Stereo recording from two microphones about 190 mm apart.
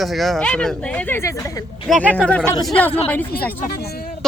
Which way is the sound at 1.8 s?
Centre (ahead or behind).